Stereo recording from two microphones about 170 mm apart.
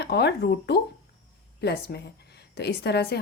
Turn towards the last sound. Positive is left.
turn(degrees=75)  # may be behind; listen again after turning